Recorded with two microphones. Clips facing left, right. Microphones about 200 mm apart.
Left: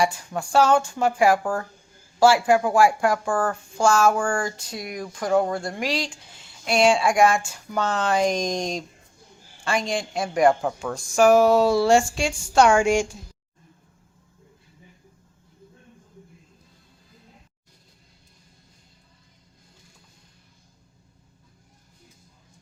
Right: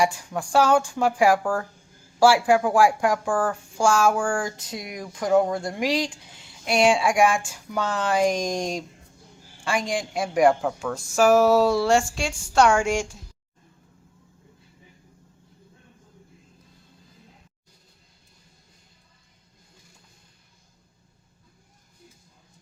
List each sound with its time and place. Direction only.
0.0 s speech: 15° right (ahead or behind)
10.6 s speech: centre (ahead or behind)